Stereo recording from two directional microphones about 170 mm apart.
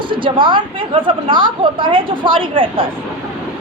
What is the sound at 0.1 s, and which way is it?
A woman's voice, 30° right (ahead or behind).